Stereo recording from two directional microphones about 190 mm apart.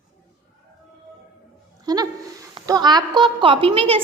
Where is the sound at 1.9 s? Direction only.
20° right (ahead or behind).